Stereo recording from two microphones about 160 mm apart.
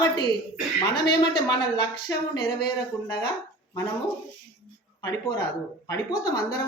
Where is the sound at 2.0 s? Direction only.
25° left (ahead or behind).